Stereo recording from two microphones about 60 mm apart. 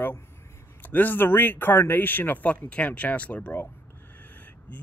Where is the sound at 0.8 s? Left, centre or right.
Left.